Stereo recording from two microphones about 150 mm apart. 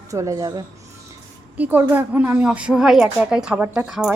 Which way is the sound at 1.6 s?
10° right (ahead or behind).